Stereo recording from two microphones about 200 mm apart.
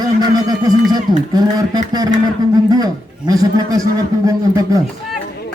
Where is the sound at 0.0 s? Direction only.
20° right (ahead or behind).